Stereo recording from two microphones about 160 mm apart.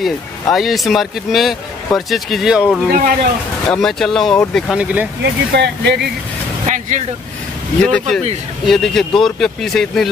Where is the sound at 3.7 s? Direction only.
5° left (ahead or behind).